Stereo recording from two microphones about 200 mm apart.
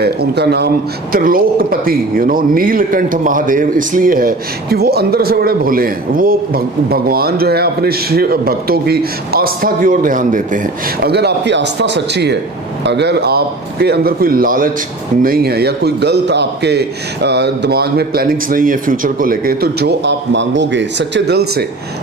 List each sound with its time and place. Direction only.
0.0 s a man's voice: 55° right (ahead or behind)
11.1 s a man's voice: 55° right (ahead or behind)